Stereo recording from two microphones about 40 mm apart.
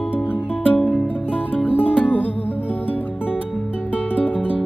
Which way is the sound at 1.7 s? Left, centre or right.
Right.